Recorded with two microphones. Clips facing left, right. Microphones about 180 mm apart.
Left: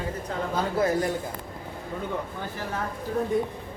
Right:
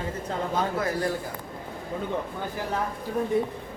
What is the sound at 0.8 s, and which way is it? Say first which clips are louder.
Speech: left 3 dB; 20° left (ahead or behind).